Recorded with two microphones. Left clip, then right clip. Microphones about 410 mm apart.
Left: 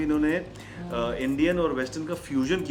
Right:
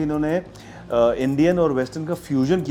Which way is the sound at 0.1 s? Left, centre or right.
Right.